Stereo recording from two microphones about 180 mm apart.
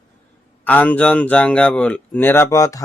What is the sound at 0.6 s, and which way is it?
Speech, 10° left (ahead or behind).